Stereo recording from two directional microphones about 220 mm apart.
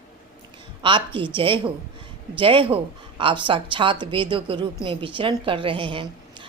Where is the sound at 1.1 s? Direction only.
20° right (ahead or behind).